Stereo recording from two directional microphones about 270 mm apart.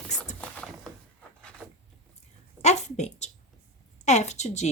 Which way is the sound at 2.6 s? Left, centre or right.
Left.